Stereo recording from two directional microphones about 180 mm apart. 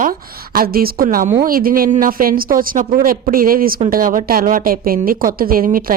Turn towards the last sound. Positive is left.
turn(degrees=-50)  # may be behind; listen again after turning